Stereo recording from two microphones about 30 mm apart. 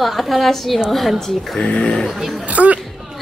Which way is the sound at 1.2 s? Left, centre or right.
Centre.